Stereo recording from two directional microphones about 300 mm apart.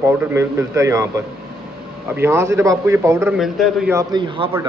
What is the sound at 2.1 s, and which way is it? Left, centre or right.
Speech, centre.